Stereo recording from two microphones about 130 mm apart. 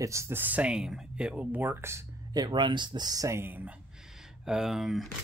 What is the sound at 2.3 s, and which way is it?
Speech, 35° right (ahead or behind).